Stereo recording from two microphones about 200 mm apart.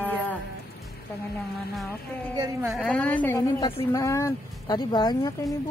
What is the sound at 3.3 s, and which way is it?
Speech, 20° left (ahead or behind).